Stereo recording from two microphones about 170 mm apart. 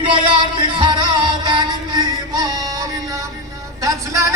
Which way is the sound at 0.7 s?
25° right (ahead or behind).